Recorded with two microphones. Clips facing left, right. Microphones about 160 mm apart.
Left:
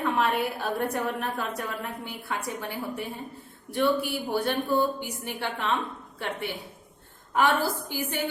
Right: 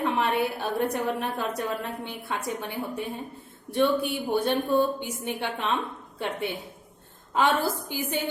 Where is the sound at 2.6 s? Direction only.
20° right (ahead or behind).